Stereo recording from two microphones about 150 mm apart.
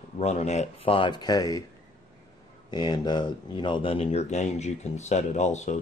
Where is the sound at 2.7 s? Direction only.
30° left (ahead or behind).